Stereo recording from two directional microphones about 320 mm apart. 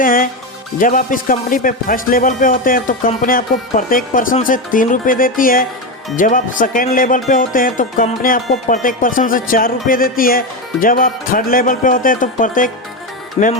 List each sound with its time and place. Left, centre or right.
0.0 s speech: left